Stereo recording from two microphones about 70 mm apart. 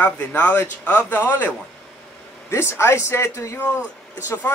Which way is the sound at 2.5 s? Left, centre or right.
Left.